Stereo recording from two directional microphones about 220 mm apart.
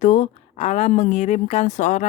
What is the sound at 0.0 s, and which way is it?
Speech, 35° left (ahead or behind).